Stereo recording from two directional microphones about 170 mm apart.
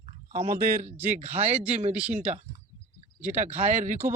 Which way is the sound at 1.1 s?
40° right (ahead or behind).